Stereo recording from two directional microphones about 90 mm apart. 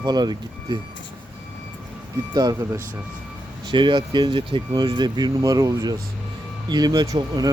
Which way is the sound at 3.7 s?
65° right (ahead or behind).